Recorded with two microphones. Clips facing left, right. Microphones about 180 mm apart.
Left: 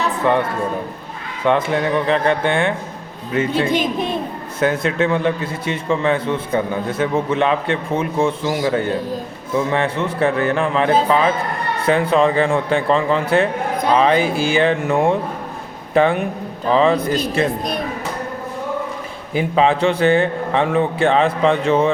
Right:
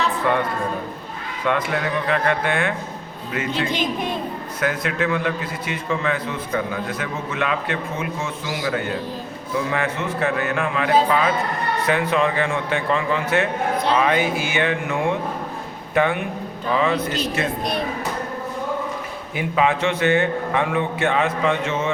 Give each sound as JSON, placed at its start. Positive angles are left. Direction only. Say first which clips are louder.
{"t": 1.5, "sound": "a man's voice", "louder": "left 5 dB", "side_deg": 25}
{"t": 19.3, "sound": "a man's voice", "louder": "left 4 dB", "side_deg": 30}